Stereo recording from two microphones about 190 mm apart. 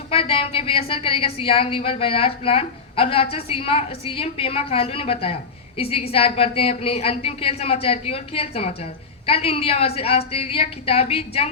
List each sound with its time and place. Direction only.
0.1 s a woman's voice: 30° left (ahead or behind)